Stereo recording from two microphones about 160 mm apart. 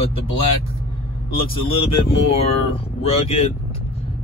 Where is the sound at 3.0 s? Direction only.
40° left (ahead or behind).